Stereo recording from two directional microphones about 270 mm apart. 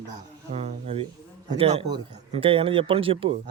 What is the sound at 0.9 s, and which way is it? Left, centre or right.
A man's voice, right.